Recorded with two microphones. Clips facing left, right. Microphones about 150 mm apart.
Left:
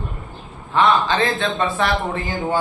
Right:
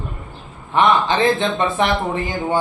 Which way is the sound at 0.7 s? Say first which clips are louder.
Right 1 dB; 20° right (ahead or behind).